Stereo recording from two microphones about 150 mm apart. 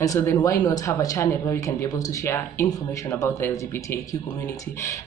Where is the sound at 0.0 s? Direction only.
20° left (ahead or behind).